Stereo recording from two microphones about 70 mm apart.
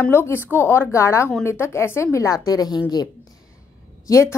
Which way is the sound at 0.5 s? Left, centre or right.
Left.